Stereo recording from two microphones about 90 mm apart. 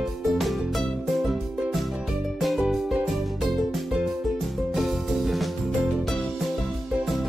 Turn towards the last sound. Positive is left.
turn(degrees=0)  # may be behind; listen again after turning